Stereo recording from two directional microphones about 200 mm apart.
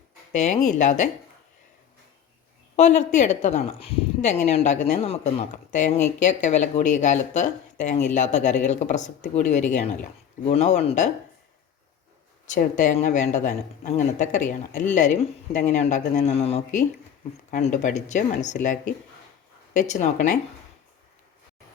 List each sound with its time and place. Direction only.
0.3 s speech: 35° left (ahead or behind)
2.7 s speech: 35° left (ahead or behind)
12.5 s speech: 40° left (ahead or behind)